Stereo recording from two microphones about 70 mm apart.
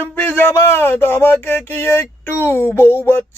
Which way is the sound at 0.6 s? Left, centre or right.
Left.